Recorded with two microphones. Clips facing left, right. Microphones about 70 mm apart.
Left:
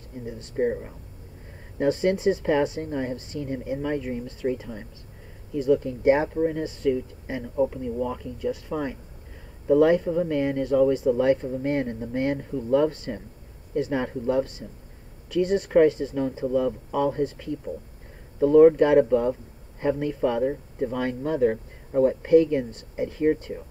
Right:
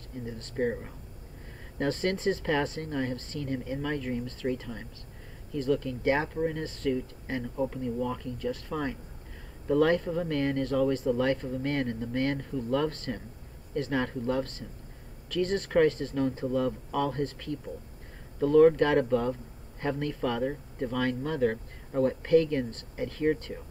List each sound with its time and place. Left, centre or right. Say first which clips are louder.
0.2 s speech: left 5 dB; centre
1.8 s speech: left 6 dB; centre